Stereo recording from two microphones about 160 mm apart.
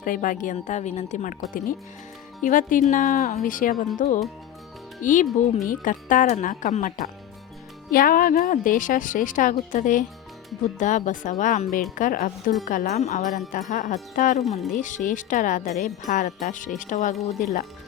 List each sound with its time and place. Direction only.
0.0 s a woman's voice: 60° left (ahead or behind)